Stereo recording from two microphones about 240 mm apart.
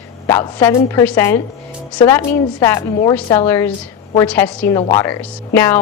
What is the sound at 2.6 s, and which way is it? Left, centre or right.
A woman's voice, centre.